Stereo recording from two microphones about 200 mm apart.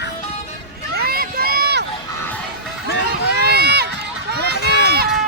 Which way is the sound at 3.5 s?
55° right (ahead or behind).